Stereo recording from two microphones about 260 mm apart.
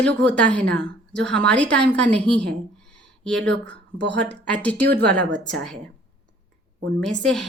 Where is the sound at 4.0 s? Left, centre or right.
Right.